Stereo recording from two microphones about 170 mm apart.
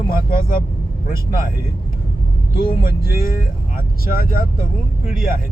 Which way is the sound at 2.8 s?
60° left (ahead or behind).